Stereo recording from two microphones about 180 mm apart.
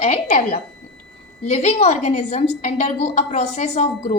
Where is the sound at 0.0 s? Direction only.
40° left (ahead or behind).